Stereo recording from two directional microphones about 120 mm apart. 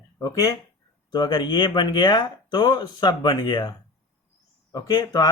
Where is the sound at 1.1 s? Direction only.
35° left (ahead or behind).